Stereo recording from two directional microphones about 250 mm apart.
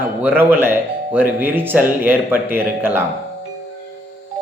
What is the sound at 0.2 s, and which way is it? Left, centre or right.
Speech, centre.